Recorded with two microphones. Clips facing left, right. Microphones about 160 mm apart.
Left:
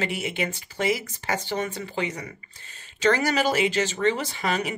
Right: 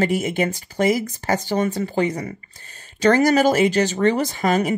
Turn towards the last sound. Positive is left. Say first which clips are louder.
# right 7 dB
turn(degrees=-45)  # may be behind; listen again after turning